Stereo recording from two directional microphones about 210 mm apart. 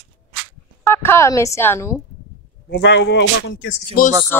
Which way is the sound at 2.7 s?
55° left (ahead or behind).